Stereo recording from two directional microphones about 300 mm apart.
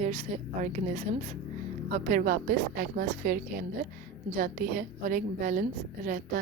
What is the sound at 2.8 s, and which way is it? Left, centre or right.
A woman's voice, right.